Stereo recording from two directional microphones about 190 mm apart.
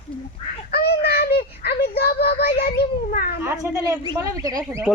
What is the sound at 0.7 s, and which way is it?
Child singing, 60° left (ahead or behind).